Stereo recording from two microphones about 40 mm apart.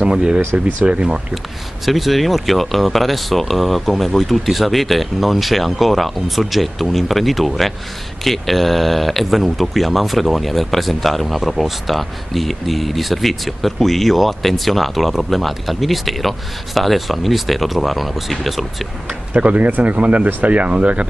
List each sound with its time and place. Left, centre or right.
0.0 s speech: right
1.9 s speech: centre
19.3 s speech: right